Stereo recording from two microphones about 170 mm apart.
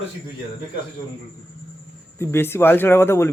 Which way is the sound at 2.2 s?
15° left (ahead or behind).